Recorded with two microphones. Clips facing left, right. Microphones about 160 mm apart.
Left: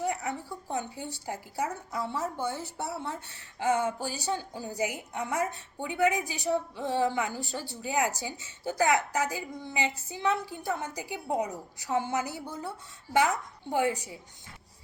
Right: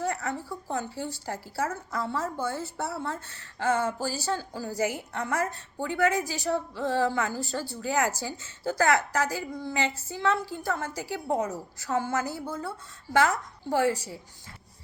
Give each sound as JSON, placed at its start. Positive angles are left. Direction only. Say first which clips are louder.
{"t": 0.0, "sound": "a woman's voice", "louder": "right 1 dB", "side_deg": 15}
{"t": 13.7, "sound": "a woman's voice", "louder": "right 3 dB", "side_deg": 20}